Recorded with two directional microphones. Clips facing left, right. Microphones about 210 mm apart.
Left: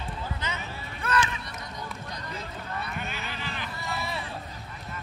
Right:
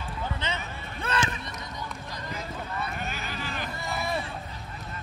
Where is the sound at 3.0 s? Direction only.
45° right (ahead or behind).